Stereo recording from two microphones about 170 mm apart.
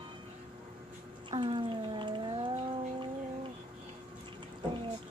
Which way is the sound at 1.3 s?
30° right (ahead or behind).